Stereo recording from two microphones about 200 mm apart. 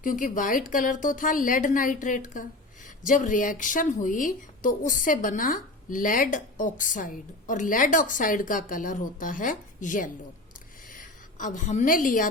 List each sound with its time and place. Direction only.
0.0 s a woman's voice: 40° left (ahead or behind)